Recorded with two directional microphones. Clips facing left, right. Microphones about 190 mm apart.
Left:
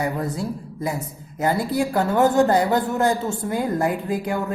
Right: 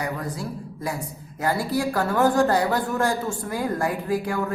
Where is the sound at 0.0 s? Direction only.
25° left (ahead or behind).